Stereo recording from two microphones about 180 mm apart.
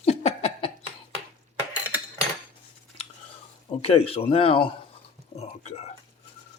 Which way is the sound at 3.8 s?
30° left (ahead or behind).